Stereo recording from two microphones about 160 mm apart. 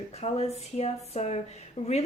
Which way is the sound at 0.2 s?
40° left (ahead or behind).